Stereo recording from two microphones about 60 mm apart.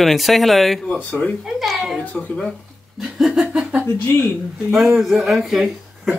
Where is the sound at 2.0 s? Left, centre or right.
Left.